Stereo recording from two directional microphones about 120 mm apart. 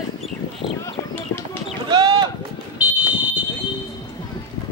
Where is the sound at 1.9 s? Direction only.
30° right (ahead or behind).